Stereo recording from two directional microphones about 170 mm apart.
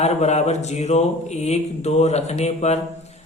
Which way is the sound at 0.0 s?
40° left (ahead or behind).